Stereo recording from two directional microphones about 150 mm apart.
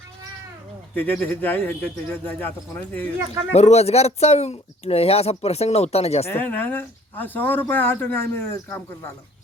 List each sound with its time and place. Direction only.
0.9 s speech: 10° left (ahead or behind)
3.5 s speech: 45° left (ahead or behind)
6.2 s speech: 15° left (ahead or behind)